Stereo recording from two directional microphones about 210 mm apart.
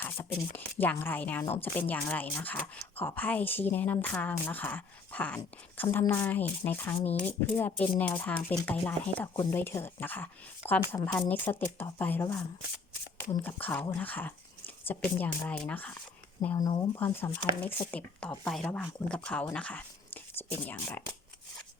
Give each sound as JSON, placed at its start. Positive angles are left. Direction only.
{"t": 0.0, "sound": "speech", "side_deg": 10}
{"t": 7.0, "sound": "speech", "side_deg": 30}
{"t": 7.3, "sound": "speech", "side_deg": 10}
{"t": 16.6, "sound": "speech", "side_deg": 20}